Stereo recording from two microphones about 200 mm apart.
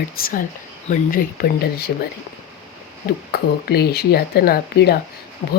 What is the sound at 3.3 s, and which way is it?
Speech, 50° left (ahead or behind).